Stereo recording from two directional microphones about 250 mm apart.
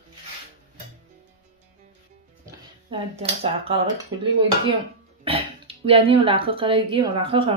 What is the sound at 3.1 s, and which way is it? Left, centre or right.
Speech, right.